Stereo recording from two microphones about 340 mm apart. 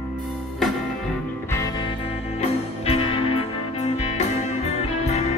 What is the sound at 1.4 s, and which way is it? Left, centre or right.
Music, centre.